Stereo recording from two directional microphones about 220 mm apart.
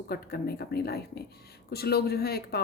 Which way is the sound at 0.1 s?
45° left (ahead or behind).